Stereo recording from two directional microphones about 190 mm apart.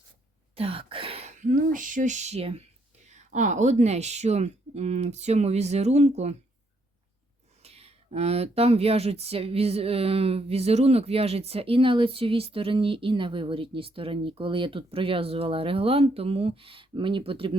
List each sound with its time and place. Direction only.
0.5 s speech: 30° right (ahead or behind)
7.6 s speech: 30° right (ahead or behind)